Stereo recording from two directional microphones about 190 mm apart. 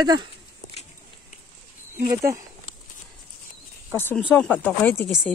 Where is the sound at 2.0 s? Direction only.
15° right (ahead or behind).